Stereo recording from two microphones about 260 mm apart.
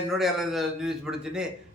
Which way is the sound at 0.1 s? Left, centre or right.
Centre.